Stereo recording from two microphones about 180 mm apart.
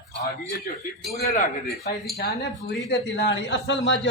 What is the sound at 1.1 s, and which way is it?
Speech, 40° left (ahead or behind).